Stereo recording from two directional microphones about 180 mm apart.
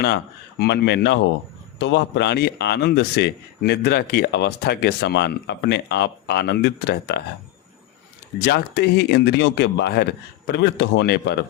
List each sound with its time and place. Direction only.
0.6 s speech: 65° left (ahead or behind)
8.4 s speech: 70° left (ahead or behind)